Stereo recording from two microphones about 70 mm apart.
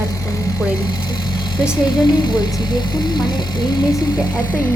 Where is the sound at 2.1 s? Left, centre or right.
Left.